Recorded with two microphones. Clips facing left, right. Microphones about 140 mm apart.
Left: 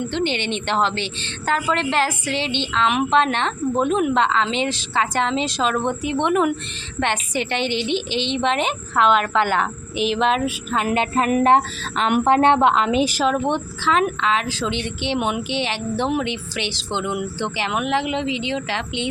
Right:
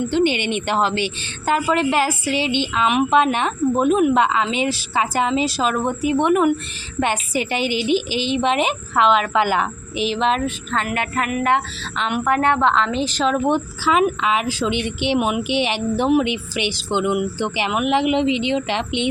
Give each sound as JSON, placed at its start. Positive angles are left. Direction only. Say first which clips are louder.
{"t": 0.1, "sound": "a woman's voice", "louder": "right 4 dB", "side_deg": -10}
{"t": 10.8, "sound": "speech", "louder": "left 7 dB", "side_deg": 25}
{"t": 12.2, "sound": "a woman's voice", "louder": "left 2 dB", "side_deg": 25}